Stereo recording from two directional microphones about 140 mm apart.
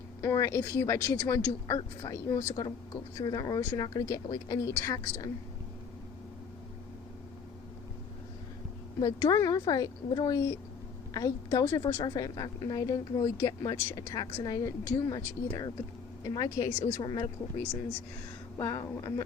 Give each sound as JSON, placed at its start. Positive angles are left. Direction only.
{"t": 0.2, "sound": "a woman's voice", "side_deg": 20}
{"t": 9.0, "sound": "a woman's voice", "side_deg": 30}
{"t": 18.5, "sound": "a woman's voice", "side_deg": 25}